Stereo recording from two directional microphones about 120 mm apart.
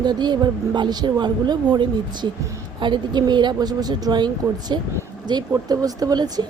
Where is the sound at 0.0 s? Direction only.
35° right (ahead or behind).